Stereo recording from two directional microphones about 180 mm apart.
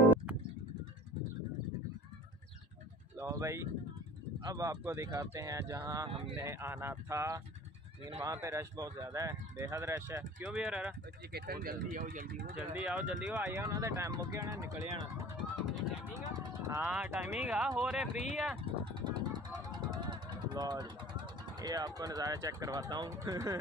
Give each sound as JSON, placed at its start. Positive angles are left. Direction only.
{"t": 3.2, "sound": "speech", "side_deg": -15}
{"t": 11.3, "sound": "speech", "side_deg": -55}
{"t": 12.7, "sound": "speech", "side_deg": -5}
{"t": 13.4, "sound": "speech", "side_deg": -15}
{"t": 18.6, "sound": "vehicle", "side_deg": -25}